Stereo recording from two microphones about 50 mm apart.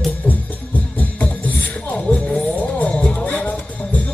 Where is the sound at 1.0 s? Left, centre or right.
Left.